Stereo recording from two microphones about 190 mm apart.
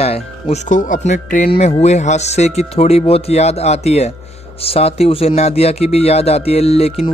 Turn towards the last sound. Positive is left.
turn(degrees=30)  # may be behind; listen again after turning